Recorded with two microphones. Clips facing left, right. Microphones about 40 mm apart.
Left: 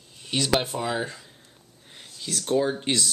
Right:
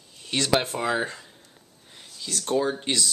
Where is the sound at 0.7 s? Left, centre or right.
Centre.